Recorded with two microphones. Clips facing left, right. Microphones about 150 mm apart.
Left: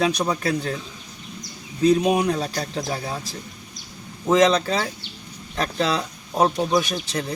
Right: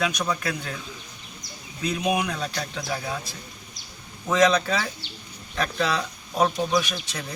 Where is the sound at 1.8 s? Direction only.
35° left (ahead or behind).